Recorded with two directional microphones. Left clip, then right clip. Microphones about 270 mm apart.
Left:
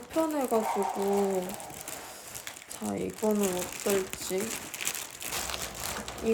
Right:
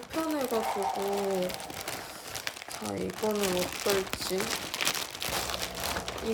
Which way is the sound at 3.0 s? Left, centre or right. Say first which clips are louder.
Left 1 dB; centre.